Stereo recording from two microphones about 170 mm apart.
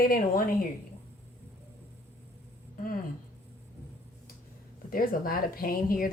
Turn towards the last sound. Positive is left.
turn(degrees=55)  # may be behind; listen again after turning